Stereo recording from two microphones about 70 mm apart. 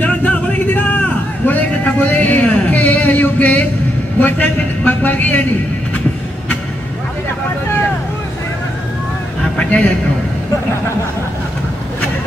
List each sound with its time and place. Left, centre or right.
0.0 s a sound: left
4.2 s a man's voice: left
9.6 s a man's voice: left